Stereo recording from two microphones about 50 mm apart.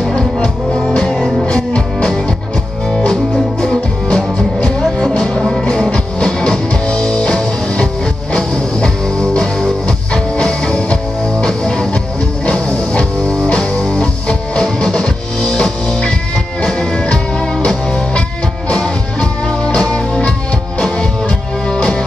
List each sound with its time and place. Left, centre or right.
1.1 s music: centre
1.5 s music: centre
3.6 s music: centre
18.7 s music: left